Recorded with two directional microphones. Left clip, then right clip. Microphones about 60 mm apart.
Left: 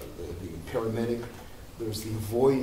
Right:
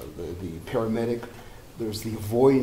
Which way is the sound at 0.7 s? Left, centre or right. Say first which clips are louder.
Right 3 dB; right.